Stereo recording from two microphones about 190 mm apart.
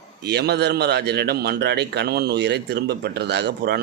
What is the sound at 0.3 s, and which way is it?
A man's voice, 60° right (ahead or behind).